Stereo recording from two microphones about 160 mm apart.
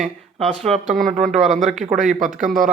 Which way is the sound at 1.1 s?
50° right (ahead or behind).